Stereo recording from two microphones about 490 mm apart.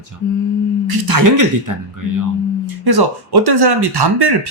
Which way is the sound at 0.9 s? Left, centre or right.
Right.